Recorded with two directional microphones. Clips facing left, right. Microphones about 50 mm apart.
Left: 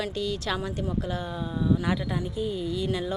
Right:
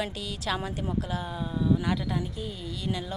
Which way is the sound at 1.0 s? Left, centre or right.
Centre.